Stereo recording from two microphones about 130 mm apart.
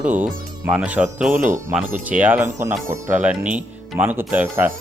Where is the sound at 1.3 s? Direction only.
90° right.